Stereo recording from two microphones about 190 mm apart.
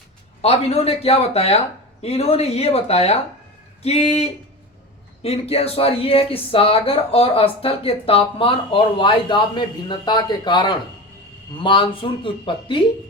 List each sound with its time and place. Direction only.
0.4 s speech: 35° left (ahead or behind)